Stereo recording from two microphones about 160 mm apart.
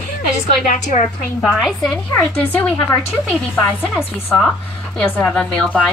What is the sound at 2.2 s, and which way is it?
Speech, 10° left (ahead or behind).